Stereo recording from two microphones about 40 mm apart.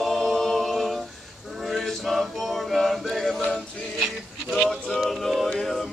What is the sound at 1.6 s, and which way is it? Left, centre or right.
Mantra, centre.